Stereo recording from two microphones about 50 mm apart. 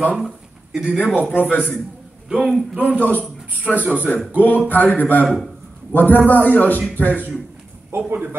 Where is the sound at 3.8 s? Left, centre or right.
Right.